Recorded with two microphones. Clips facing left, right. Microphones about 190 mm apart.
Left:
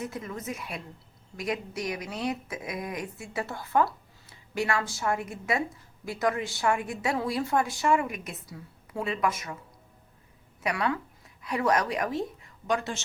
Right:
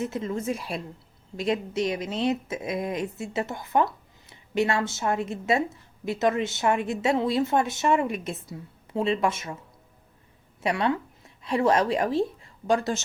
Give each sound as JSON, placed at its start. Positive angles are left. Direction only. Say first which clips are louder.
{"t": 0.0, "sound": "a woman's voice", "louder": "right 7 dB", "side_deg": -25}
{"t": 10.6, "sound": "speech", "louder": "right 4 dB", "side_deg": -25}